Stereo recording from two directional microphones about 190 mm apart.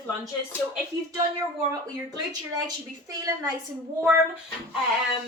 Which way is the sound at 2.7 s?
20° right (ahead or behind).